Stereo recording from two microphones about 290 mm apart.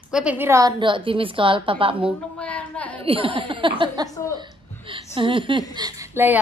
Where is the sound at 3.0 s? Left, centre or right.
Centre.